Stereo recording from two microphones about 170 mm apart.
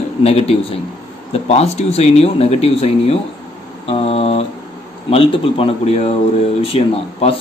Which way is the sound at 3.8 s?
35° left (ahead or behind).